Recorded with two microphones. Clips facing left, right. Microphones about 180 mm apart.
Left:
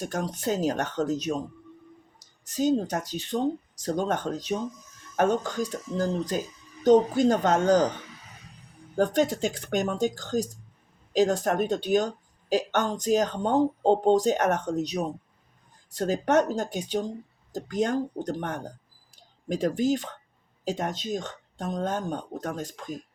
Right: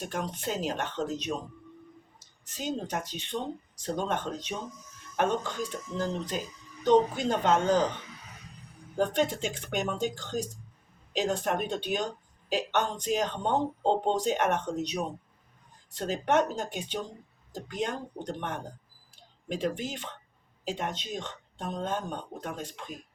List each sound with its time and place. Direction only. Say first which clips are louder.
0.1 s speech: left 5 dB; 40° left (ahead or behind)
9.0 s speech: left 4 dB; 40° left (ahead or behind)